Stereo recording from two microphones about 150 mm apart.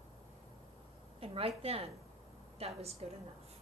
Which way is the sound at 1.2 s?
40° right (ahead or behind).